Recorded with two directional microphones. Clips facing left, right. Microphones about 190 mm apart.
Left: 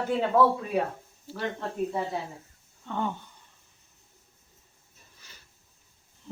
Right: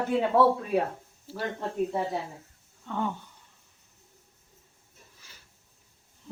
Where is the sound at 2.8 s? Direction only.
5° right (ahead or behind).